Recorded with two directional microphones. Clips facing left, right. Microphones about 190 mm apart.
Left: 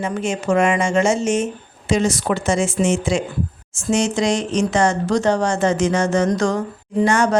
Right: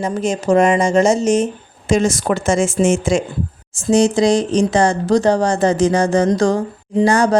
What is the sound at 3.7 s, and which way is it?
Speech, 35° right (ahead or behind).